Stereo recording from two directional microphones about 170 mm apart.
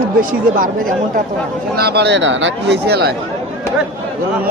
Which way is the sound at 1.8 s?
70° right (ahead or behind).